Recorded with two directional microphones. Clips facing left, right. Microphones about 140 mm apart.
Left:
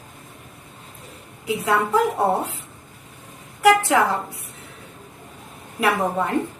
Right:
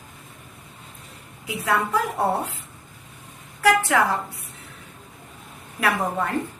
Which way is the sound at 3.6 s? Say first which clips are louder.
Left 3 dB; 20° left (ahead or behind).